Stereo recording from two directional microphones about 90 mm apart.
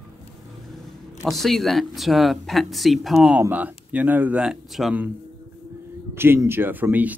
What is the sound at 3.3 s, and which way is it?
Speech, 20° right (ahead or behind).